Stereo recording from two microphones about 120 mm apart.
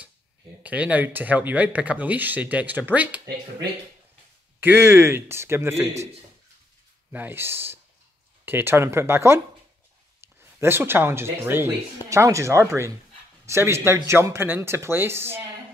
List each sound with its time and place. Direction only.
0.6 s speech: 10° right (ahead or behind)
4.6 s speech: 20° right (ahead or behind)
7.1 s speech: 15° right (ahead or behind)